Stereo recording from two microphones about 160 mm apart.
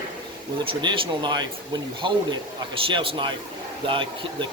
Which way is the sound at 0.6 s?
30° right (ahead or behind).